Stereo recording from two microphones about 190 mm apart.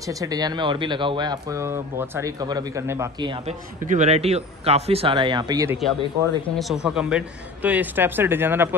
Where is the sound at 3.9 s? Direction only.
35° right (ahead or behind); by 5.7 s 20° right (ahead or behind).